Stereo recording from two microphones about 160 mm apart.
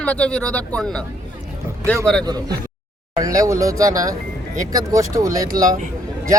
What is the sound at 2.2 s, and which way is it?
Speech, 25° right (ahead or behind).